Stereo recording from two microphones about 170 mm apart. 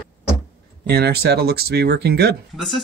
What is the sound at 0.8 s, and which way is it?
Speech, 70° right (ahead or behind).